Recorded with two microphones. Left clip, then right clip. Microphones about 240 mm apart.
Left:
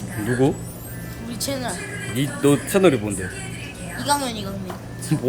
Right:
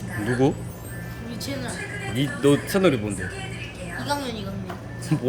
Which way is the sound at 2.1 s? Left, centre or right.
Centre.